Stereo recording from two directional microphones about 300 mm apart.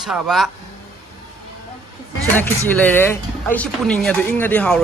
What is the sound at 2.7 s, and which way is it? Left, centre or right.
Speech, centre.